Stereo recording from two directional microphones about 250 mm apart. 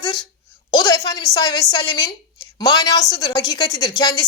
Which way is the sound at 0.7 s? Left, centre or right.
Centre.